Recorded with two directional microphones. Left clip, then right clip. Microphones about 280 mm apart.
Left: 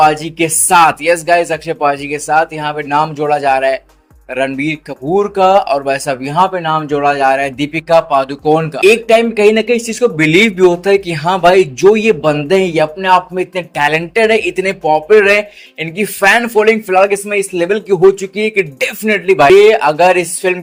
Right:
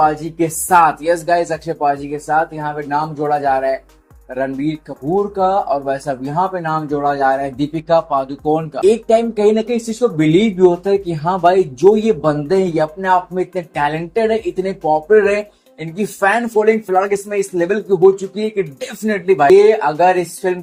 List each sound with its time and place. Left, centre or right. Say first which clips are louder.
0.0 s speech: left 5 dB; left